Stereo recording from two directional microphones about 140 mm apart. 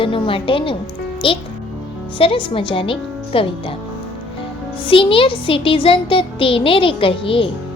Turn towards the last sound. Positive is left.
turn(degrees=40)  # may be behind; listen again after turning